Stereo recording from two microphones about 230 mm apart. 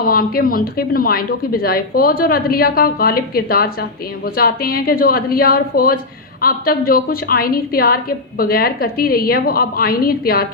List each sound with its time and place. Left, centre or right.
0.0 s speech: left